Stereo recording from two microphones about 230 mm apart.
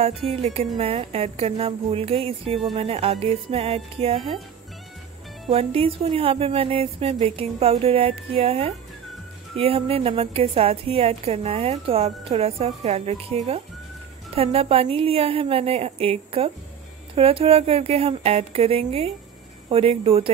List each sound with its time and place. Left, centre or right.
0.3 s a woman's voice: right
5.5 s a woman's voice: right